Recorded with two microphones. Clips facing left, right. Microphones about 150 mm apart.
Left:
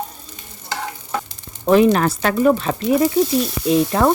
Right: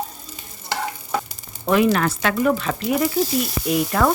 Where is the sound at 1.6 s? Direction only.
35° left (ahead or behind).